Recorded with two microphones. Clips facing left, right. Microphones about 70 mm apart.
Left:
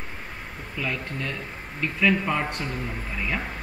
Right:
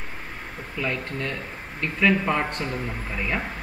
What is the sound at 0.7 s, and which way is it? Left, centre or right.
Speech, centre.